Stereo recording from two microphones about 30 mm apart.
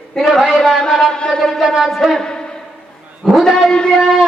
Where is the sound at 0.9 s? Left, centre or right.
Centre.